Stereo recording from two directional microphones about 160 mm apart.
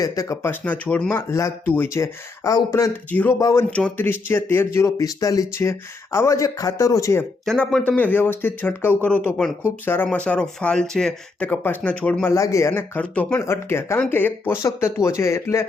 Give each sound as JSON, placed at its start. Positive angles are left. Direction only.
{"t": 0.0, "sound": "speech", "side_deg": 20}
{"t": 3.1, "sound": "speech", "side_deg": 10}
{"t": 3.7, "sound": "speech", "side_deg": 10}
{"t": 7.4, "sound": "speech", "side_deg": 5}
{"t": 12.3, "sound": "speech", "side_deg": 20}